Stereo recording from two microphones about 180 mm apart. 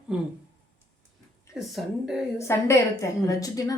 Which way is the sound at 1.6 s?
Centre (ahead or behind).